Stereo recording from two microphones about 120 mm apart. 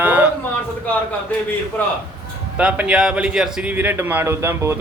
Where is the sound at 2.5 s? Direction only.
10° right (ahead or behind).